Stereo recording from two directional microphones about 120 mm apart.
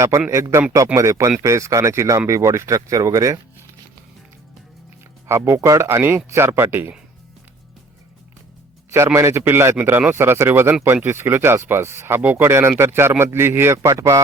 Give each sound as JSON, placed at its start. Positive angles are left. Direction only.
{"t": 0.3, "sound": "speech", "side_deg": -25}
{"t": 5.3, "sound": "speech", "side_deg": -20}
{"t": 9.1, "sound": "speech", "side_deg": -25}